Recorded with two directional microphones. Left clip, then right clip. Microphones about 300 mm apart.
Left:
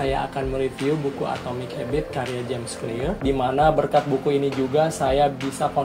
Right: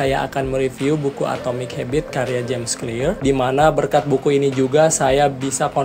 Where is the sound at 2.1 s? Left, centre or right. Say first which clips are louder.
Right 6 dB; right.